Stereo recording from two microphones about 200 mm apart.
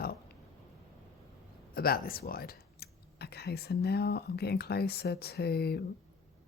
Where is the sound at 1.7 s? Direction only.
50° left (ahead or behind).